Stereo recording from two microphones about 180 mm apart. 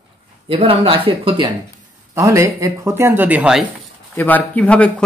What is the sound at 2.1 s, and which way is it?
Speech, 15° right (ahead or behind).